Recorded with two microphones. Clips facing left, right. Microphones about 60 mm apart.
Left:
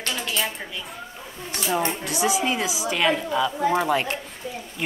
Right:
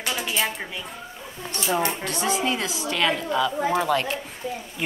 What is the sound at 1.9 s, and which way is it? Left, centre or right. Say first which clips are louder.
A woman's voice: left 1 dB; centre.